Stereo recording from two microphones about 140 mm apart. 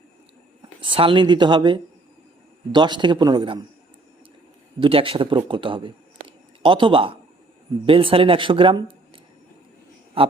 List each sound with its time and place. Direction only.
0.8 s speech: 40° right (ahead or behind)
4.8 s speech: 40° right (ahead or behind)